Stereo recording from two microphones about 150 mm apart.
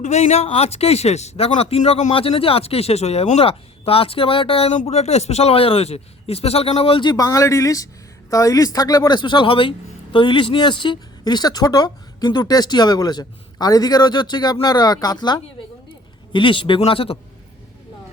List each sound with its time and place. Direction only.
0.0 s speech: 50° left (ahead or behind)
2.1 s speech: 40° left (ahead or behind)